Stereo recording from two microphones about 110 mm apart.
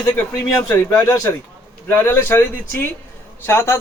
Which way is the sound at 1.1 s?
25° left (ahead or behind).